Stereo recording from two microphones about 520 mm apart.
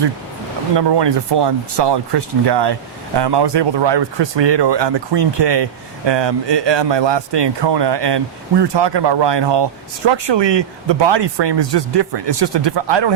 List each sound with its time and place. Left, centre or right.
0.8 s speech: right